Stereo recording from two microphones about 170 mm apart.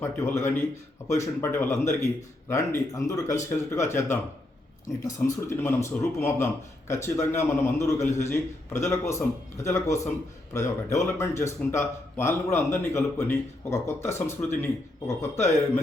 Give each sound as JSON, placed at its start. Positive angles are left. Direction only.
{"t": 0.0, "sound": "speech", "side_deg": 15}
{"t": 5.2, "sound": "speech", "side_deg": 15}